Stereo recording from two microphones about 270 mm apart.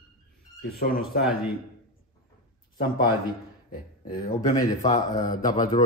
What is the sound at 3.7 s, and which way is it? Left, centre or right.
Speech, left.